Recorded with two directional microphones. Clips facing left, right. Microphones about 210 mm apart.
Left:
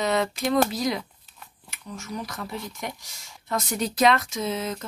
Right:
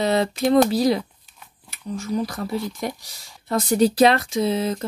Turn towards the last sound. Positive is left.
turn(degrees=-35)  # may be behind; listen again after turning